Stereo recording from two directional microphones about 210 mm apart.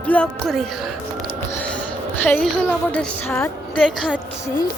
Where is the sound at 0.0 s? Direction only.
5° left (ahead or behind).